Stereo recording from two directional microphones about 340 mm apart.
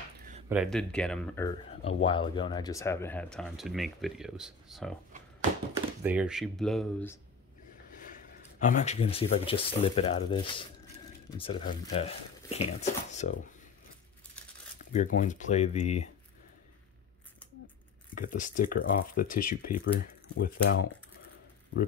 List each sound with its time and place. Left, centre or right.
0.5 s speech: centre
2.0 s speech: centre
6.0 s speech: centre
8.0 s speech: left
14.9 s speech: left
18.1 s speech: left